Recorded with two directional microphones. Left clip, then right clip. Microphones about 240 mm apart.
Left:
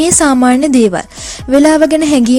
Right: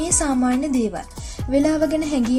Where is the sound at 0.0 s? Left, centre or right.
Left.